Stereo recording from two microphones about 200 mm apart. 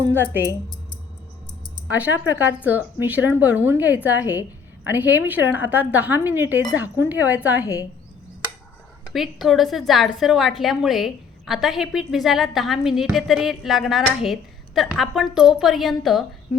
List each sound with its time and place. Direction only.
0.0 s speech: 10° right (ahead or behind)
1.9 s speech: 10° right (ahead or behind)
7.6 s speech: 15° left (ahead or behind)
9.1 s a woman's voice: centre (ahead or behind)